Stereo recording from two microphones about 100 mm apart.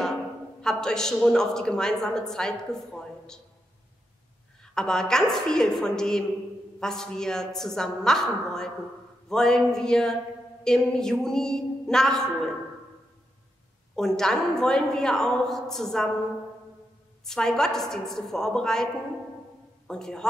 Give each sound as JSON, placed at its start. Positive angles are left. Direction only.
{"t": 0.6, "sound": "a woman's voice", "side_deg": 5}
{"t": 4.7, "sound": "a woman's voice", "side_deg": 5}
{"t": 13.9, "sound": "a woman's voice", "side_deg": 5}
{"t": 17.2, "sound": "a woman's voice", "side_deg": 5}
{"t": 19.9, "sound": "a woman's voice", "side_deg": 5}